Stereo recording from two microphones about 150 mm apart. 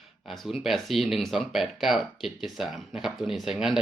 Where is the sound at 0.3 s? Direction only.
Centre (ahead or behind).